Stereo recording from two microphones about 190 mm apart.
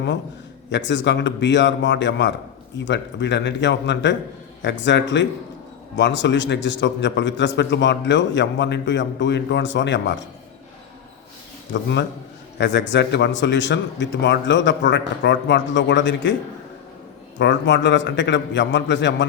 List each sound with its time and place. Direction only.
0.7 s a man's voice: 70° left (ahead or behind)
11.7 s a man's voice: 70° left (ahead or behind)
17.3 s a man's voice: 70° left (ahead or behind)